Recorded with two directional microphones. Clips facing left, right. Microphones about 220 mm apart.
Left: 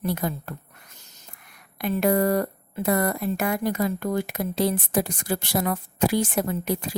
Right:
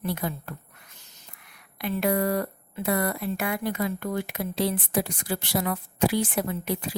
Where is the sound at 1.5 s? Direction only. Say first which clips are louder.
Left 3 dB; 45° left (ahead or behind).